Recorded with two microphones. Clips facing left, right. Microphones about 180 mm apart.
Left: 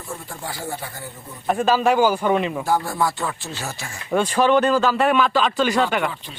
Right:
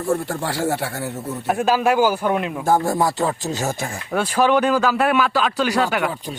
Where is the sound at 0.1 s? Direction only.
75° right (ahead or behind).